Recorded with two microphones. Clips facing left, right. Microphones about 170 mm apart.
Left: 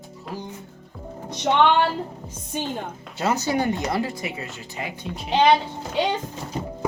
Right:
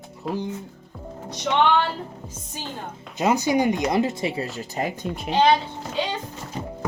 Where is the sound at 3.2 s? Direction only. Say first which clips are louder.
Right 3 dB; 15° right (ahead or behind); by 4.5 s 30° right (ahead or behind).